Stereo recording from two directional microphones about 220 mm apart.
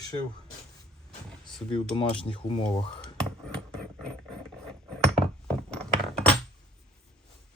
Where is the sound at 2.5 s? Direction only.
20° left (ahead or behind).